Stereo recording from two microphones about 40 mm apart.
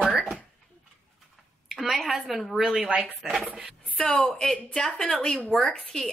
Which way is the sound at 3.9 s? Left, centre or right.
Left.